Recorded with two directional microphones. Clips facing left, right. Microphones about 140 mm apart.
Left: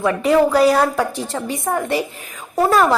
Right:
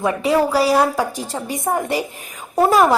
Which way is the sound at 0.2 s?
5° right (ahead or behind).